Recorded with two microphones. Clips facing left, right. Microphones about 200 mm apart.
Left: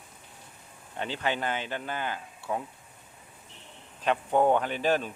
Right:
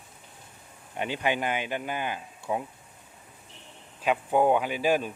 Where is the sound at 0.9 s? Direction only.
15° right (ahead or behind).